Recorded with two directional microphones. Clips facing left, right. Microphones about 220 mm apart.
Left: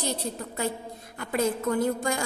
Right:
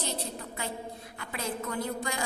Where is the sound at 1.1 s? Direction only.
45° left (ahead or behind).